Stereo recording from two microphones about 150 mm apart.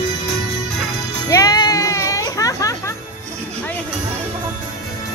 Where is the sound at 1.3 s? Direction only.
25° left (ahead or behind).